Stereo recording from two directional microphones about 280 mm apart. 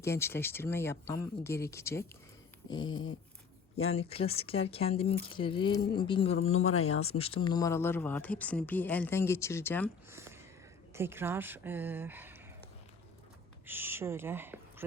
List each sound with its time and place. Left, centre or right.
0.0 s speech: centre
2.6 s dog: centre
3.9 s speech: left
6.5 s speech: left
7.2 s speech: centre
10.1 s a sound: centre
10.9 s speech: centre
13.7 s speech: centre